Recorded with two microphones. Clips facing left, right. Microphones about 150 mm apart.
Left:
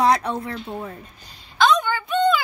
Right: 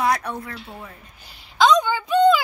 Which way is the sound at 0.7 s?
40° left (ahead or behind).